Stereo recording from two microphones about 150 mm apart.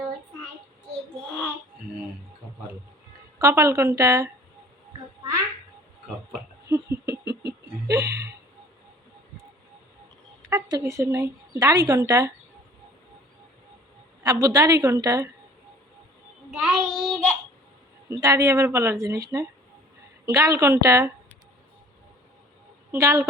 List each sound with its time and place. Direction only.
3.3 s speech: 20° right (ahead or behind)
6.7 s a sound: 20° right (ahead or behind)
7.9 s speech: 20° right (ahead or behind)
10.5 s speech: 20° right (ahead or behind)
14.3 s speech: 25° right (ahead or behind)
16.6 s child singing: 5° left (ahead or behind)
18.1 s speech: 20° right (ahead or behind)
22.9 s a woman's voice: 20° right (ahead or behind)